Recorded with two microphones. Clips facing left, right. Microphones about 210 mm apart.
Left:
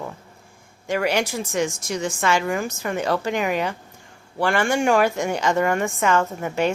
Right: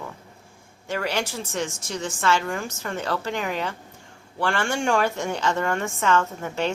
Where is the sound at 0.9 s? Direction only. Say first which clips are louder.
Left 5 dB; 15° left (ahead or behind).